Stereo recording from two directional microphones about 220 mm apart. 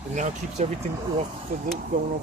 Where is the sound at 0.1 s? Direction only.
35° right (ahead or behind).